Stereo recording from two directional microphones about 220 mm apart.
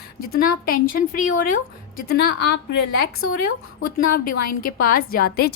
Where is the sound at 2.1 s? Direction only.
50° left (ahead or behind).